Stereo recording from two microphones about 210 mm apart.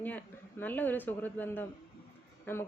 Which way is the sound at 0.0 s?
10° left (ahead or behind).